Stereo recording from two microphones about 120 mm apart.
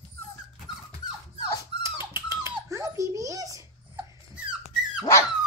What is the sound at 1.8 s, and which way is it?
Dog, 20° right (ahead or behind).